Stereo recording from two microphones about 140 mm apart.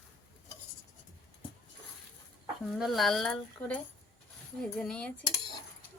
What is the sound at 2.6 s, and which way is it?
A woman's voice, centre (ahead or behind).